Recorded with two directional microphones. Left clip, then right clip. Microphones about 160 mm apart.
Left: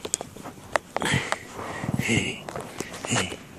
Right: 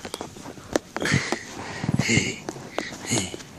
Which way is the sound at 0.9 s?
10° left (ahead or behind).